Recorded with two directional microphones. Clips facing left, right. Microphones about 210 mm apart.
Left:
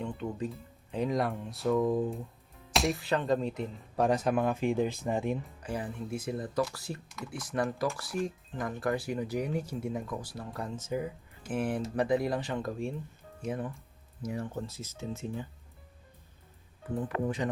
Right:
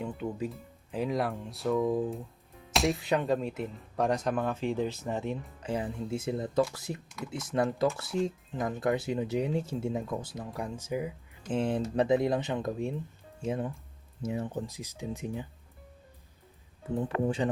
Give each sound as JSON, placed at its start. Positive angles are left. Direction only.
{"t": 0.0, "sound": "speech", "side_deg": -5}
{"t": 3.0, "sound": "speech", "side_deg": -15}
{"t": 5.6, "sound": "speech", "side_deg": -25}
{"t": 11.4, "sound": "speech", "side_deg": -25}
{"t": 16.9, "sound": "speech", "side_deg": -30}